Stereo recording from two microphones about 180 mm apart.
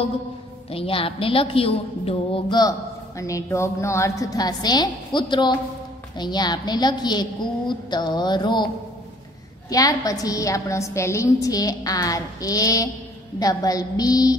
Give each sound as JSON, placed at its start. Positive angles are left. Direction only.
{"t": 0.7, "sound": "a woman's voice", "side_deg": 30}
{"t": 9.7, "sound": "a woman's voice", "side_deg": 20}